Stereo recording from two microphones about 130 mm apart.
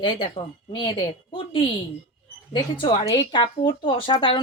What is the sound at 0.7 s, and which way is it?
A woman's voice, 40° left (ahead or behind).